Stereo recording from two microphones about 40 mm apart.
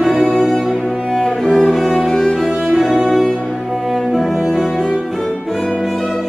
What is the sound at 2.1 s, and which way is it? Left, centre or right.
Music, centre.